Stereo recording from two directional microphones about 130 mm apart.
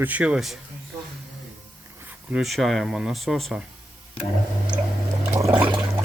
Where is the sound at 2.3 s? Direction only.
Centre (ahead or behind).